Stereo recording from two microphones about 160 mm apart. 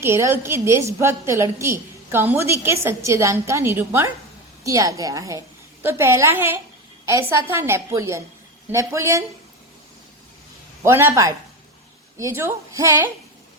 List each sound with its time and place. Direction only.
0.0 s a woman's voice: 15° right (ahead or behind)
10.8 s a woman's voice: 15° right (ahead or behind)